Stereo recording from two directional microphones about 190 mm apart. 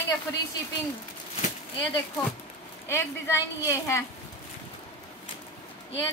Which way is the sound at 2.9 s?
15° left (ahead or behind).